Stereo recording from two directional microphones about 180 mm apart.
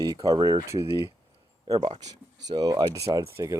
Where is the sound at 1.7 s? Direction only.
25° right (ahead or behind).